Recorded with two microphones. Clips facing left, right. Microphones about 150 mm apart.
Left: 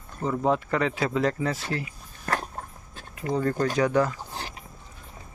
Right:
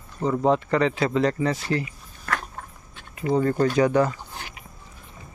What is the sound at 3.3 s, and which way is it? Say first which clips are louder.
Speech: right 4 dB; 5° right (ahead or behind).